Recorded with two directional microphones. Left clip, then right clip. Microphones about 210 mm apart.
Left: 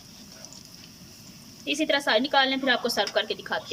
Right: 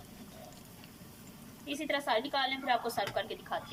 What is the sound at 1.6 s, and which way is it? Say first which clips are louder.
A woman's voice: left 9 dB; 50° left (ahead or behind).